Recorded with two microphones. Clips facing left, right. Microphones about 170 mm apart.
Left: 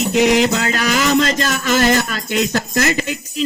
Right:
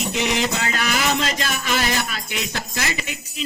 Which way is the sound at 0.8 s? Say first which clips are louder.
Left 7 dB; 45° left (ahead or behind).